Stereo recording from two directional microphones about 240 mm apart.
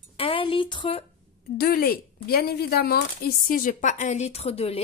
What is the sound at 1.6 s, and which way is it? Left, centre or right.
Speech, left.